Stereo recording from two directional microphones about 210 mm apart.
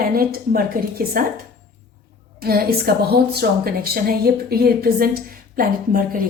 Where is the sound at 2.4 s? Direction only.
45° right (ahead or behind).